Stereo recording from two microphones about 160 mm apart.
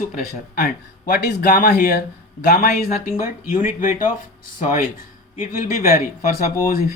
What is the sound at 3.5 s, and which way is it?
Speech, 55° left (ahead or behind).